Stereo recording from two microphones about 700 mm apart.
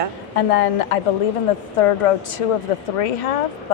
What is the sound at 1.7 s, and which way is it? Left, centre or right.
A woman's voice, left.